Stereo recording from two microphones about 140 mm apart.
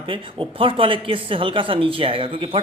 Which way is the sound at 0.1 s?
40° right (ahead or behind).